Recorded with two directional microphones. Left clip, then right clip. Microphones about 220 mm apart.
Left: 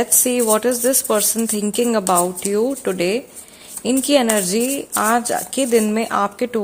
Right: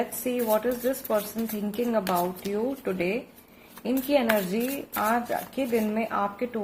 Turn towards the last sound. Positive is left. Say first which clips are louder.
# left 9 dB
turn(degrees=50)  # may be behind; listen again after turning